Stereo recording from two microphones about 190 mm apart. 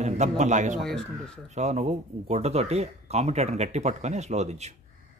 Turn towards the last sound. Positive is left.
turn(degrees=-35)  # may be behind; listen again after turning